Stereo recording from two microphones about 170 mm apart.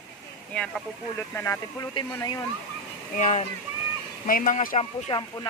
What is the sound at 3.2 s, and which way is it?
A man's voice, 45° left (ahead or behind).